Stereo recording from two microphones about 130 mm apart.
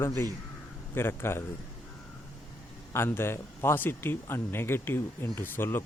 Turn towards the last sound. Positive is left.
turn(degrees=15)  # may be behind; listen again after turning